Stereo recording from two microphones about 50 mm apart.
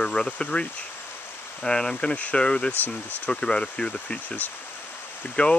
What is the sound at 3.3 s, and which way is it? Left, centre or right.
Speech, centre.